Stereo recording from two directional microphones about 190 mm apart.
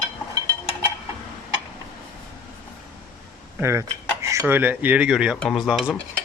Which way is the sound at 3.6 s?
15° right (ahead or behind).